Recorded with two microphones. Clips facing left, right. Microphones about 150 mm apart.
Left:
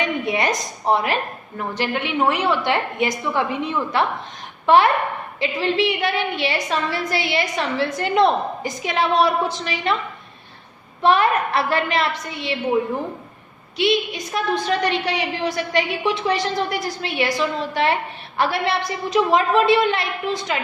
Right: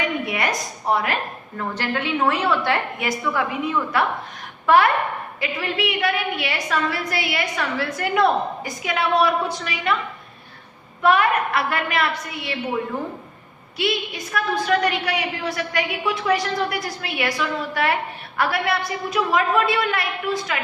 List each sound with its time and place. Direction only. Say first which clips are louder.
0.0 s a woman's voice: left 2 dB; 25° left (ahead or behind)
11.0 s a woman's voice: left 1 dB; 30° left (ahead or behind)
13.7 s a woman's voice: left 5 dB; 20° left (ahead or behind)